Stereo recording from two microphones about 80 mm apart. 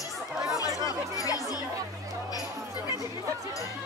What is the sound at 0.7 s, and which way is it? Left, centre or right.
Chatter, left.